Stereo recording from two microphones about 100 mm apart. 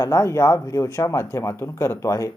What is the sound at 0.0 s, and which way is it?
Speech, 30° left (ahead or behind).